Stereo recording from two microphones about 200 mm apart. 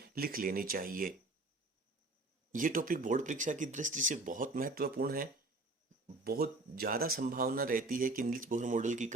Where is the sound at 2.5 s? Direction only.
40° right (ahead or behind).